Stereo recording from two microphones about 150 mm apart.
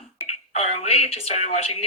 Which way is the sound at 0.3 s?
45° left (ahead or behind).